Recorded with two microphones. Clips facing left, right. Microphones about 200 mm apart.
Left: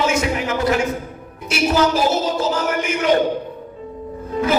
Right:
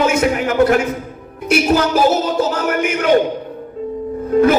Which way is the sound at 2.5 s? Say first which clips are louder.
Right 2 dB; 60° right (ahead or behind).